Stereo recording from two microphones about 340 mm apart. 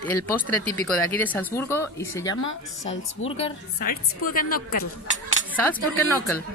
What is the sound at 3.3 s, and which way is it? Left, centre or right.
A woman's voice, left.